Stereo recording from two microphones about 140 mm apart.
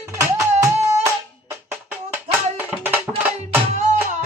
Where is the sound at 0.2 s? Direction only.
20° right (ahead or behind).